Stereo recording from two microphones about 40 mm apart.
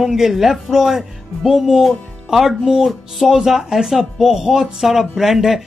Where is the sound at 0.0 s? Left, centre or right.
Centre.